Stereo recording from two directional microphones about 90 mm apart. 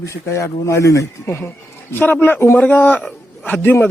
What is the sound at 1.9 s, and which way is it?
Speech, 20° left (ahead or behind).